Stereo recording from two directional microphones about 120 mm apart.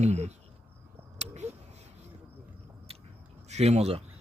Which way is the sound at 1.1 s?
70° right (ahead or behind).